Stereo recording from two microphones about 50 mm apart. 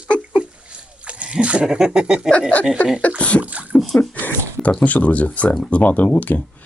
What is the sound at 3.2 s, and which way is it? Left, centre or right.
Speech, left.